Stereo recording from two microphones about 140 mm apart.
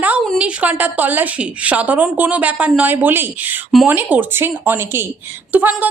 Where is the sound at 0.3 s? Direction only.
10° right (ahead or behind).